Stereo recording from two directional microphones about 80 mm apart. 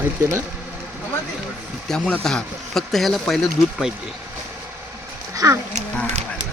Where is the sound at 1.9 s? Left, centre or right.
Centre.